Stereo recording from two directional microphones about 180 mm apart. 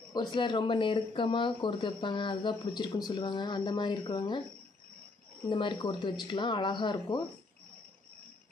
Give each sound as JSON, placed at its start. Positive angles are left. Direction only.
{"t": 0.1, "sound": "speech", "side_deg": 25}
{"t": 5.5, "sound": "speech", "side_deg": 25}